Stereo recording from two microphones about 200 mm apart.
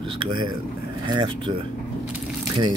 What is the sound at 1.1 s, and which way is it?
Speech, 25° right (ahead or behind).